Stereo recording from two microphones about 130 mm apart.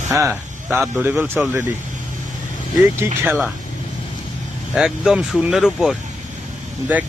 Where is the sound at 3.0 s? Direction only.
20° right (ahead or behind).